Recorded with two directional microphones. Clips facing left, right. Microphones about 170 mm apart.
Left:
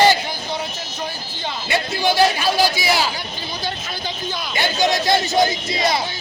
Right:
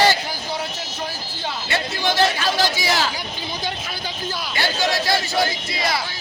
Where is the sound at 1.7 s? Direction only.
10° left (ahead or behind).